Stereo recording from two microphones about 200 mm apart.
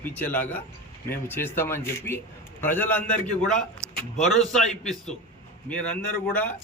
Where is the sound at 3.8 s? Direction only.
15° right (ahead or behind).